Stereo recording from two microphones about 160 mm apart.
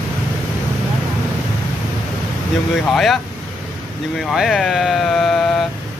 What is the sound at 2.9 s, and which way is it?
Speech, centre (ahead or behind).